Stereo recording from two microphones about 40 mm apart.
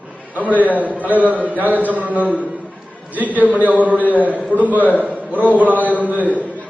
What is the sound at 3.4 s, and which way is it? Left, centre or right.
A man's voice, right.